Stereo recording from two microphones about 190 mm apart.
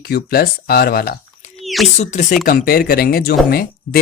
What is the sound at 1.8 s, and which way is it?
Speech, 35° left (ahead or behind).